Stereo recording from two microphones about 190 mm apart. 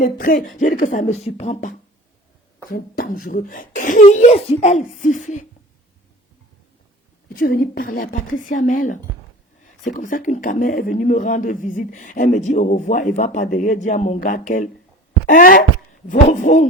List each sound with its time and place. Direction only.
0.0 s speech: 45° left (ahead or behind)
2.6 s speech: 55° left (ahead or behind)
7.3 s speech: 50° left (ahead or behind)